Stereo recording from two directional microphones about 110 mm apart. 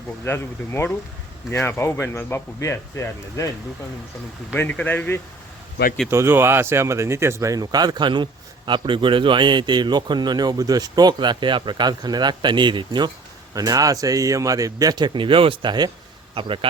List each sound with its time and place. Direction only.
0.3 s speech: 20° left (ahead or behind)
4.5 s a man's voice: 15° left (ahead or behind)
6.1 s a man's voice: 20° right (ahead or behind); by 16.6 s 50° right (ahead or behind)